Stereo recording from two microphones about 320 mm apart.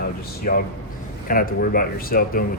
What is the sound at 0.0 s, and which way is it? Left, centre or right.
A man's voice, left.